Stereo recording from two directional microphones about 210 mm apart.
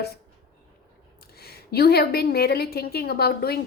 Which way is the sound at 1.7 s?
50° left (ahead or behind).